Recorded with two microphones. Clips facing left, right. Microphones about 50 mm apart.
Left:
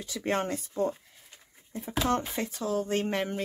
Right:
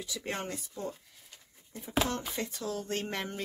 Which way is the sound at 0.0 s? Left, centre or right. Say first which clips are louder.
Left 7 dB; left.